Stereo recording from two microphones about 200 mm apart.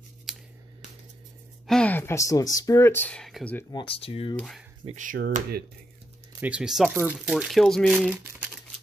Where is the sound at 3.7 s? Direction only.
25° left (ahead or behind).